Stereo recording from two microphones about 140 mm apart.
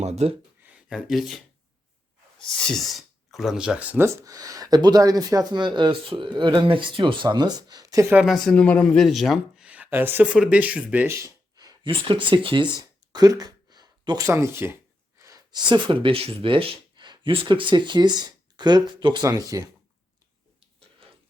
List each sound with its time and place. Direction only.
0.0 s speech: 50° right (ahead or behind)
0.7 s speech: 5° right (ahead or behind)
3.2 s speech: centre (ahead or behind)
4.2 s speech: 25° right (ahead or behind)
8.1 s speech: centre (ahead or behind)
11.2 s speech: 25° right (ahead or behind)
12.8 s a sound: 25° right (ahead or behind)
14.3 s speech: 20° right (ahead or behind)